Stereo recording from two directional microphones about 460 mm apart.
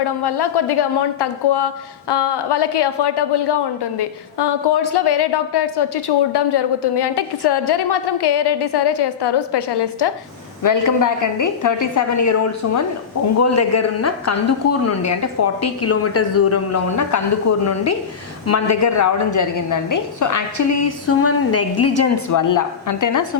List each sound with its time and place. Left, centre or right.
0.3 s a woman's voice: left
10.6 s a woman's voice: left
18.4 s a woman's voice: left